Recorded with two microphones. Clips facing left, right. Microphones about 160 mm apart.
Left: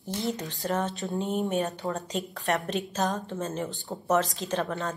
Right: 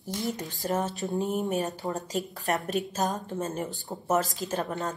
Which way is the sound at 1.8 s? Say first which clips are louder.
Even; 15° right (ahead or behind).